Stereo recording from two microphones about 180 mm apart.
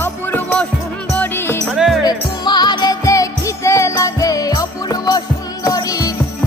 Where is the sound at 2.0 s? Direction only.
25° left (ahead or behind).